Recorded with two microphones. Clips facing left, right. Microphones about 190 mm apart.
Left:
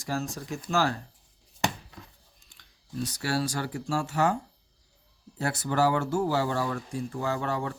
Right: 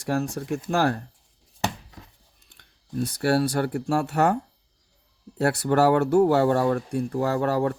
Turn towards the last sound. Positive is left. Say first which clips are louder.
# right 7 dB
turn(degrees=-60)  # may be behind; listen again after turning